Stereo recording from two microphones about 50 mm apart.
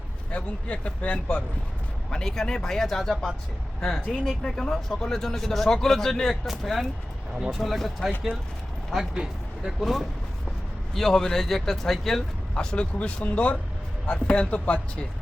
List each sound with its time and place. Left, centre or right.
0.3 s a man's voice: left
2.0 s speech: centre
6.5 s speech: centre
9.1 s speech: centre
9.8 s speech: centre
12.5 s a man's voice: left